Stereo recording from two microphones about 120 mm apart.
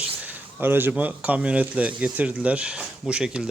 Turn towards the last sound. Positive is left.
turn(degrees=-5)  # may be behind; listen again after turning